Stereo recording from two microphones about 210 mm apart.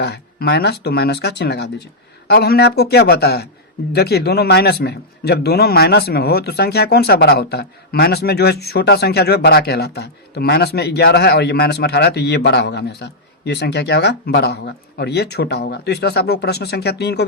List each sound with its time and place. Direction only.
0.0 s a man's voice: 50° left (ahead or behind)